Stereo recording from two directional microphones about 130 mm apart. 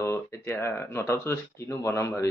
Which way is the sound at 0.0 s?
20° left (ahead or behind).